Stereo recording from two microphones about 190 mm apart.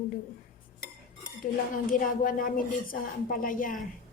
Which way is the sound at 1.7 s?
45° left (ahead or behind).